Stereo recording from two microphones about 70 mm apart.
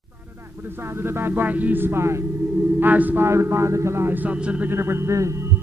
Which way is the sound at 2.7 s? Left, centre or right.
Right.